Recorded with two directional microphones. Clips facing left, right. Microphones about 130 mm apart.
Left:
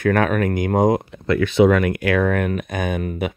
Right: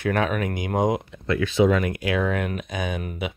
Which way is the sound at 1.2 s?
70° left (ahead or behind).